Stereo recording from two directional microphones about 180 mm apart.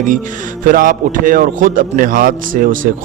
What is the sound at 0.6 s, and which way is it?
A man's voice, 50° right (ahead or behind).